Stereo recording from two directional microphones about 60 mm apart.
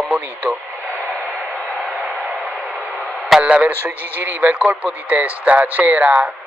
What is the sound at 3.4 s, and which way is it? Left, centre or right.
Speech, right.